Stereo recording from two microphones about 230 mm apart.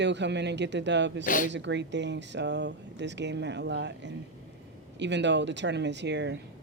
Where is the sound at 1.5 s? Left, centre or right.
Right.